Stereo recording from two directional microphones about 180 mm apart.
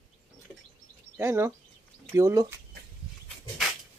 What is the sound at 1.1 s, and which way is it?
Speech, 15° right (ahead or behind).